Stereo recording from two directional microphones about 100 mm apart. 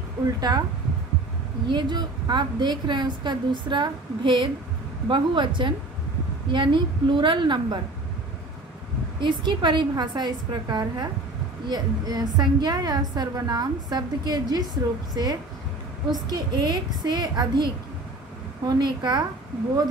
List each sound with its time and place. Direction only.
1.7 s a woman's voice: 50° right (ahead or behind)
9.2 s a woman's voice: 50° right (ahead or behind)
18.7 s a woman's voice: 45° right (ahead or behind)